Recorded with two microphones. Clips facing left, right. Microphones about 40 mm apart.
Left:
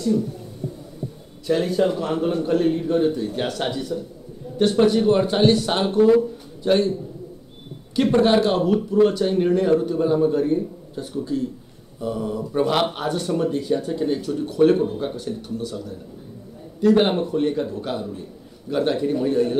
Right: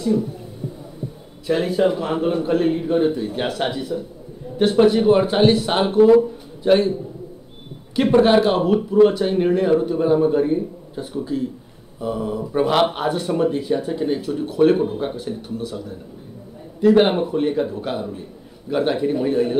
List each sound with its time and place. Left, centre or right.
0.0 s speech: centre
1.5 s speech: centre